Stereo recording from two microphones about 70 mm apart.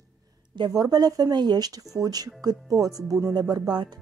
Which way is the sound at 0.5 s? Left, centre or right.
Right.